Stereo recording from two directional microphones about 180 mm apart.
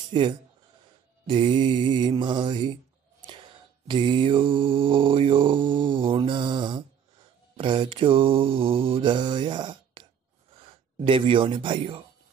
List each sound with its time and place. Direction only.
0.1 s speech: 25° right (ahead or behind)
1.2 s mantra: 25° right (ahead or behind)
10.6 s speech: 30° right (ahead or behind)